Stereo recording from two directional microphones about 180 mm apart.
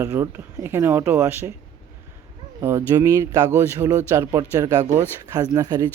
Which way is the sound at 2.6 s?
20° right (ahead or behind).